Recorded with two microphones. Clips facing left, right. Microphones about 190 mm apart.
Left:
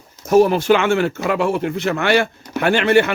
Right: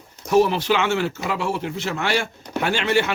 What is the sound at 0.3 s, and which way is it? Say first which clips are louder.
Speech: left 5 dB; 45° left (ahead or behind).